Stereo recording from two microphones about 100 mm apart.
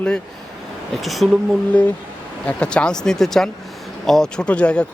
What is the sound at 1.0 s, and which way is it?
Speech, centre (ahead or behind).